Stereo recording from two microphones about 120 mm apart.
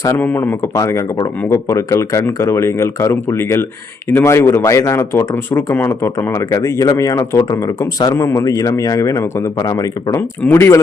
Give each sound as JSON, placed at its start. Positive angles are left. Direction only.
{"t": 0.0, "sound": "speech", "side_deg": 25}
{"t": 0.3, "sound": "speech", "side_deg": 15}
{"t": 0.7, "sound": "speech", "side_deg": 25}